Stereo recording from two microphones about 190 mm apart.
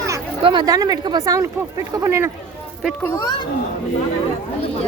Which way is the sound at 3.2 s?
20° left (ahead or behind).